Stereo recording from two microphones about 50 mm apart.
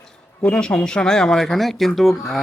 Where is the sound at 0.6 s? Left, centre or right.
Centre.